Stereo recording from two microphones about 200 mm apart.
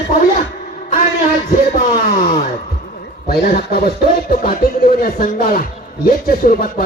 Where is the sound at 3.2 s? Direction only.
50° left (ahead or behind).